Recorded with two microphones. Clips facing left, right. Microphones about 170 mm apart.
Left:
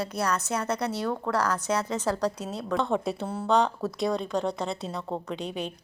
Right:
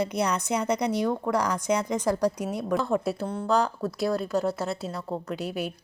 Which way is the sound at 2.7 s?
5° right (ahead or behind).